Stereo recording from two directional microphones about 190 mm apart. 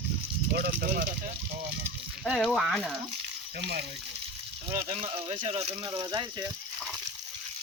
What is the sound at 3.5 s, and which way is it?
Speech, 60° right (ahead or behind).